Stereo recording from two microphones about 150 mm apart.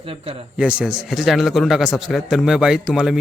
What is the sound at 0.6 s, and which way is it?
Speech, 5° right (ahead or behind).